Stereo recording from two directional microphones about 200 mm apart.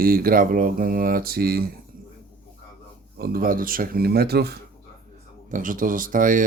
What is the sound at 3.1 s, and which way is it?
Speech, 50° right (ahead or behind).